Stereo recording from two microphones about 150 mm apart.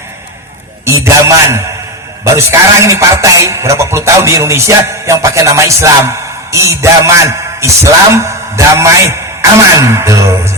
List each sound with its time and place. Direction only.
0.9 s a man's voice: 20° right (ahead or behind)